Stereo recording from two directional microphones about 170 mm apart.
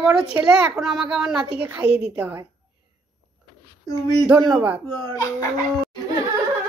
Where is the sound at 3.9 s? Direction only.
20° left (ahead or behind).